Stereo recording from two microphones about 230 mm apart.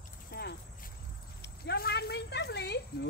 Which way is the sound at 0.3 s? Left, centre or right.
Left.